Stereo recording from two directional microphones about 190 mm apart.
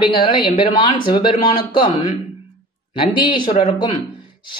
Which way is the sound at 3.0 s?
25° left (ahead or behind).